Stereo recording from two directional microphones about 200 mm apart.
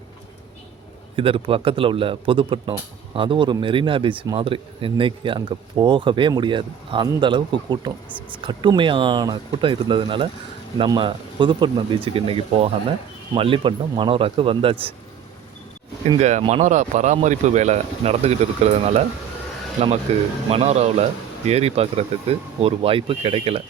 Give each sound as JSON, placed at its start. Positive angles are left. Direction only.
{"t": 1.1, "sound": "speech", "side_deg": -25}
{"t": 16.4, "sound": "speech", "side_deg": -30}
{"t": 20.1, "sound": "speech", "side_deg": -30}